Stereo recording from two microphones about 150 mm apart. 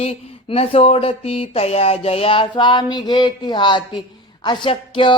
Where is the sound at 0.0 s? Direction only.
45° left (ahead or behind).